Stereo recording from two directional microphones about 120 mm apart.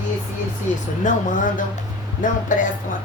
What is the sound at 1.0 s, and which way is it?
Speech, 90° left.